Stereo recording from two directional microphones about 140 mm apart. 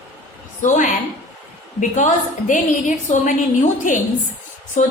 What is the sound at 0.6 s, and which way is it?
A woman's voice, 65° left (ahead or behind).